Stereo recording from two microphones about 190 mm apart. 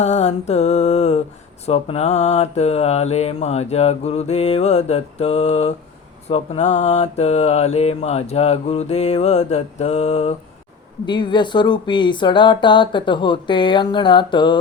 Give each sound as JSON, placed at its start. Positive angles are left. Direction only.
{"t": 0.0, "sound": "mantra", "side_deg": 35}
{"t": 11.0, "sound": "speech", "side_deg": 25}